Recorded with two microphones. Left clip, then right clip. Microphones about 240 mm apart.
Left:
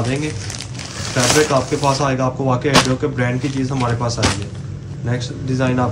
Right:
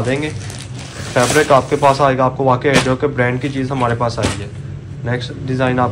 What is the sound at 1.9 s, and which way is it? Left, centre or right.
Speech, centre.